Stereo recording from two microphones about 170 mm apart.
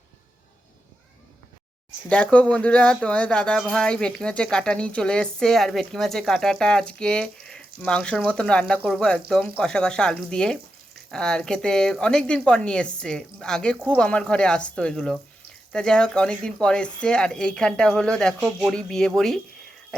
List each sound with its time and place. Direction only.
2.0 s speech: 5° left (ahead or behind)